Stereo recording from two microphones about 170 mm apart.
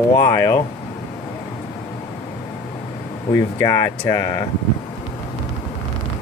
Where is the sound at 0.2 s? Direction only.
20° left (ahead or behind).